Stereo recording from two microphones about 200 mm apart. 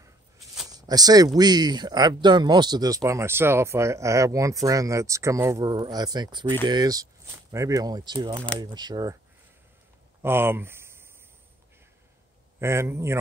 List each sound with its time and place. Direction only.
0.7 s speech: 20° right (ahead or behind)
6.4 s speech: 10° left (ahead or behind)
6.7 s speech: 20° right (ahead or behind)
10.2 s speech: 10° right (ahead or behind)
12.5 s speech: 15° right (ahead or behind)